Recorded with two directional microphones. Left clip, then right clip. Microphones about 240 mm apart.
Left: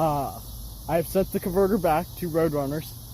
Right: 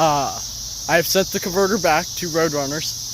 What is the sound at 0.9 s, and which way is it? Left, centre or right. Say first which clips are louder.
Speech: right 7 dB; centre.